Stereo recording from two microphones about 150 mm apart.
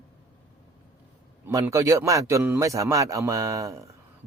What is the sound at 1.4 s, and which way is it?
A man's voice, 15° right (ahead or behind).